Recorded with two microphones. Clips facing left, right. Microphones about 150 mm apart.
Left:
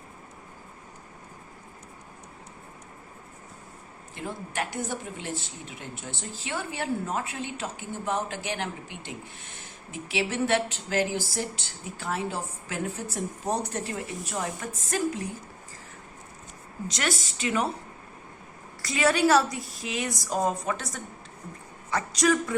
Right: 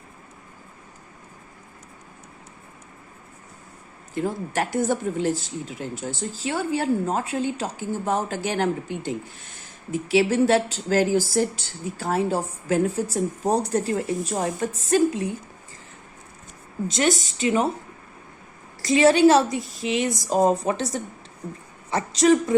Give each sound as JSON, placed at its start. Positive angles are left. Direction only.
{"t": 4.1, "sound": "speech", "side_deg": -40}
{"t": 16.9, "sound": "a woman's voice", "side_deg": -25}
{"t": 18.9, "sound": "a woman's voice", "side_deg": -30}